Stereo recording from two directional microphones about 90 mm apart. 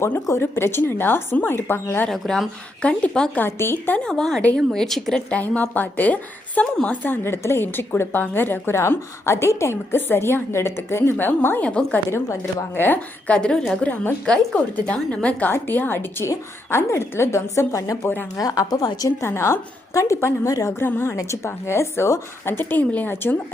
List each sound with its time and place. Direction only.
0.3 s a woman's voice: 30° left (ahead or behind)
2.0 s a woman's voice: 5° left (ahead or behind); by 3.9 s 25° left (ahead or behind)
3.9 s a woman's voice: 10° left (ahead or behind)
5.4 s a woman's voice: 20° left (ahead or behind)
11.7 s a woman's voice: 10° left (ahead or behind)
12.1 s a woman's voice: 30° left (ahead or behind)
19.2 s a woman's voice: 30° left (ahead or behind)
20.8 s a woman's voice: 25° left (ahead or behind)